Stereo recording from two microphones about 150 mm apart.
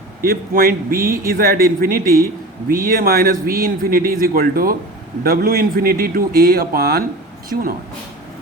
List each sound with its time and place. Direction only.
0.2 s a man's voice: 75° right (ahead or behind)
0.9 s speech: 20° right (ahead or behind)
1.2 s a man's voice: 80° right